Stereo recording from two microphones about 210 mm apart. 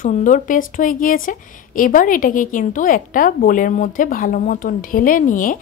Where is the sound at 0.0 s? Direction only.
35° left (ahead or behind).